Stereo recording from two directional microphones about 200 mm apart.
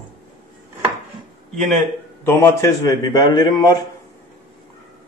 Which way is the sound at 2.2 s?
15° left (ahead or behind).